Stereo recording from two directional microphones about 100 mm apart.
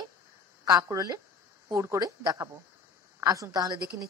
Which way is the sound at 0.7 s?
35° right (ahead or behind).